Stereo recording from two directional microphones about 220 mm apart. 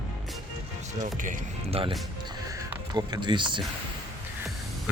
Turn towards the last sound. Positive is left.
turn(degrees=-20)  # may be behind; listen again after turning